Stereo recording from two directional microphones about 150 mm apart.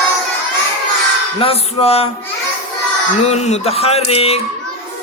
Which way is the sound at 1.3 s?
40° left (ahead or behind).